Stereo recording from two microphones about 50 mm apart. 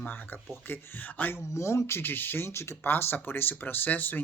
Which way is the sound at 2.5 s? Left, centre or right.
Left.